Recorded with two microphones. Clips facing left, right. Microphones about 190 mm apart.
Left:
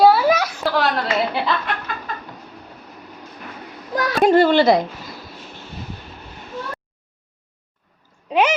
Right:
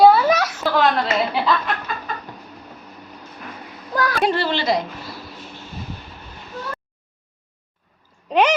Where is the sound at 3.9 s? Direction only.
20° left (ahead or behind).